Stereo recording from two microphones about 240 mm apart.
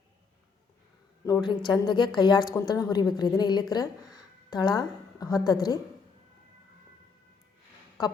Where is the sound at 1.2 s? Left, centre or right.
Centre.